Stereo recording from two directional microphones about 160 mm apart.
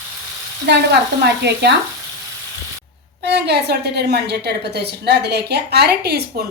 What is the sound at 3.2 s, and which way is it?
A woman's voice, 90° right.